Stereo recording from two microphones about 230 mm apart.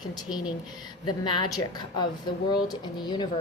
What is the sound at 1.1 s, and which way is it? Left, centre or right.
Speech, centre.